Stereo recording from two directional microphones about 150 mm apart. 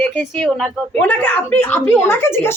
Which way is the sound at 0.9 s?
10° left (ahead or behind).